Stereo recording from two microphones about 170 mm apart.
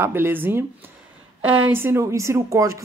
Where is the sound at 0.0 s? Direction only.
15° right (ahead or behind).